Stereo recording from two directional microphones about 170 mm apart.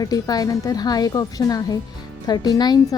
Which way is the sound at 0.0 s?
20° left (ahead or behind).